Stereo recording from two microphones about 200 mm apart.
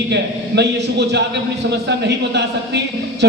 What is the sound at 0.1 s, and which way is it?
Speech, 60° right (ahead or behind).